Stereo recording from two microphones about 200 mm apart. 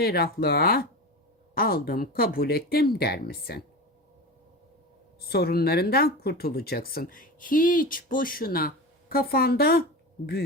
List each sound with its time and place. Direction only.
0.0 s speech: 50° left (ahead or behind)
5.2 s speech: 50° left (ahead or behind)